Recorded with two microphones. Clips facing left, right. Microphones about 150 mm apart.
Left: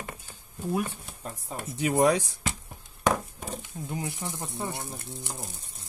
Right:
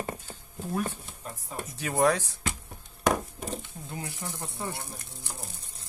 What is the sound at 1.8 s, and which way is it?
Speech, 20° left (ahead or behind).